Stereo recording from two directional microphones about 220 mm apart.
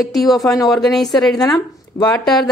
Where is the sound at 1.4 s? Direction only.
15° left (ahead or behind).